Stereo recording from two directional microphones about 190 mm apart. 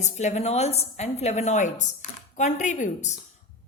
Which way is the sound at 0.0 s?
35° left (ahead or behind).